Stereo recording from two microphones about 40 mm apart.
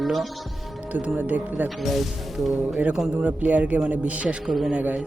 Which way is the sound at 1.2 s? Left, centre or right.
Right.